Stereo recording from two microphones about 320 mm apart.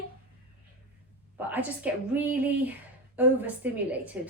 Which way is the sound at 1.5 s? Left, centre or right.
Centre.